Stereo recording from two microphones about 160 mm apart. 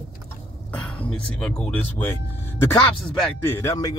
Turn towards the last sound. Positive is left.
turn(degrees=20)  # may be behind; listen again after turning